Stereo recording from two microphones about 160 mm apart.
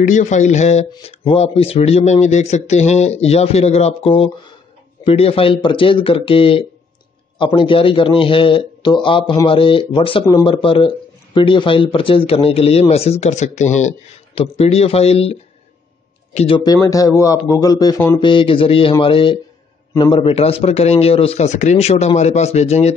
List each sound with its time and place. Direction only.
0.0 s speech: 50° left (ahead or behind)
16.3 s speech: 35° left (ahead or behind)
18.2 s speech: 30° left (ahead or behind)